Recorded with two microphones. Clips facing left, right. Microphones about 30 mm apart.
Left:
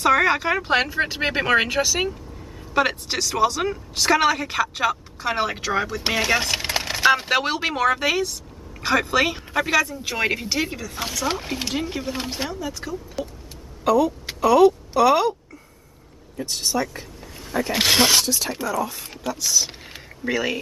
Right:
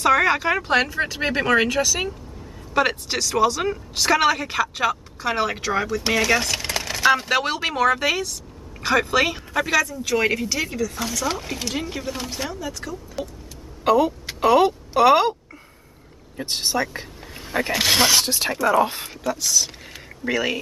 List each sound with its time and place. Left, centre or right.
0.0 s speech: centre
2.7 s speech: centre
6.6 s a sound: centre
7.1 s speech: centre
12.2 s speech: left
12.4 s speech: centre
13.8 s speech: right
16.3 s speech: right
17.7 s speech: centre
18.2 s speech: right
19.4 s speech: centre